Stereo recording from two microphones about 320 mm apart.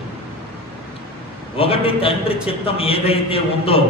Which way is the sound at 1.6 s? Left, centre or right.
Centre.